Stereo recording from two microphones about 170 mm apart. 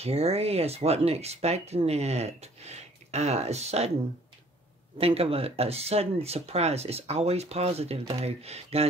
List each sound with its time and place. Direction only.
0.0 s speech: 35° right (ahead or behind)
4.9 s speech: 35° right (ahead or behind)